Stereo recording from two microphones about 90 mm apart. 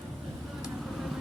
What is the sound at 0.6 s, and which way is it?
Vehicle, centre (ahead or behind).